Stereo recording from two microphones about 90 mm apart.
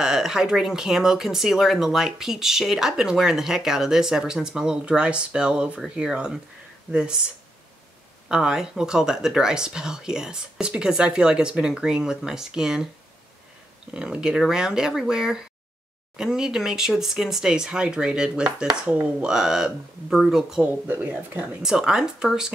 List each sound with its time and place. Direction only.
0.0 s speech: 5° right (ahead or behind)
8.3 s speech: 10° right (ahead or behind)
13.9 s speech: 10° right (ahead or behind)
20.8 s speech: 20° right (ahead or behind)
21.6 s speech: 5° right (ahead or behind)